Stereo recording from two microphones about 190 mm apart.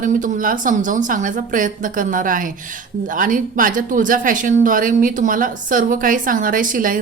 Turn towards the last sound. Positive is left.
turn(degrees=-45)  # may be behind; listen again after turning